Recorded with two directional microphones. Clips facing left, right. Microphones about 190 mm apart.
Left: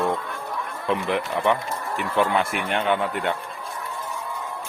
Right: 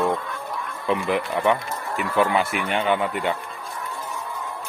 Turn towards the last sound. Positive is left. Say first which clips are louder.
# right 1 dB
turn(degrees=0)  # may be behind; listen again after turning